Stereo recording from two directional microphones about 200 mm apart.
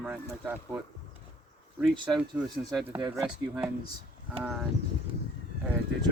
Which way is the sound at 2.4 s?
5° right (ahead or behind).